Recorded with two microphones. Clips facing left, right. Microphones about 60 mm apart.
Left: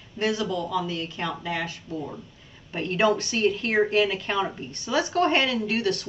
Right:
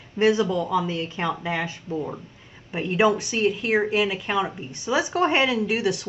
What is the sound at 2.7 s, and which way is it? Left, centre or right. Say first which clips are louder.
Speech: right 2 dB; centre.